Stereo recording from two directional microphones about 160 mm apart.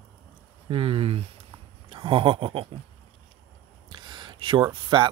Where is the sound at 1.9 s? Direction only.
35° right (ahead or behind).